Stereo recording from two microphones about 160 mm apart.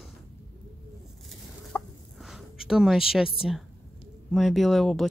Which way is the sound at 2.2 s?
Centre (ahead or behind).